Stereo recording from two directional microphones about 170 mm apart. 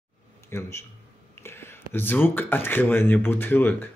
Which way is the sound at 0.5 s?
15° left (ahead or behind).